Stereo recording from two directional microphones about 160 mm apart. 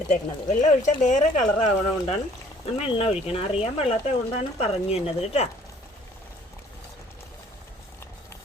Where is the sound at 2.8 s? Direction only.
35° left (ahead or behind).